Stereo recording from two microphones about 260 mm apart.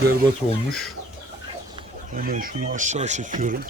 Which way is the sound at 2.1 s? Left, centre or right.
Right.